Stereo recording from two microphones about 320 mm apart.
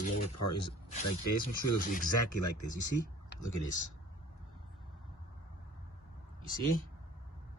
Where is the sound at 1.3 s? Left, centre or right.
Left.